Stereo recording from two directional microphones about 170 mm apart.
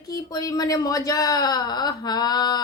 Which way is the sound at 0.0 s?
20° left (ahead or behind).